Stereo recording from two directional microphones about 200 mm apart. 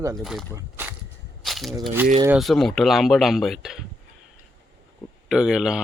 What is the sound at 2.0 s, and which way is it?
Speech, 10° right (ahead or behind).